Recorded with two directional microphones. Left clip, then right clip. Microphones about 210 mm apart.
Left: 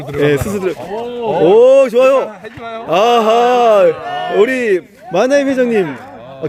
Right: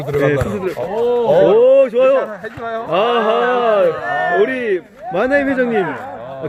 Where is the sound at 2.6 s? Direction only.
30° right (ahead or behind).